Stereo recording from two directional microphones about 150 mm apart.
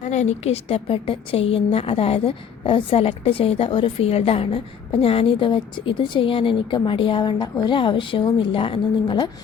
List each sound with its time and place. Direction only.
0.0 s a woman's voice: 50° left (ahead or behind); by 9.3 s 30° left (ahead or behind)